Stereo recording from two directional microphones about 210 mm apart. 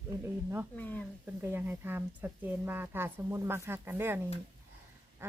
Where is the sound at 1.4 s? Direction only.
10° right (ahead or behind).